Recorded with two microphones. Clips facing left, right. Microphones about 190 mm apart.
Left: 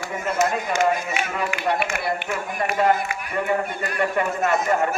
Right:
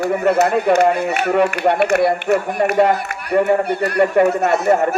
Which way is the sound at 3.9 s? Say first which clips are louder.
Right 9 dB; 40° right (ahead or behind).